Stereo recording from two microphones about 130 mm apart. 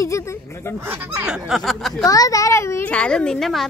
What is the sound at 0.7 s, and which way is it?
Speech, 15° right (ahead or behind).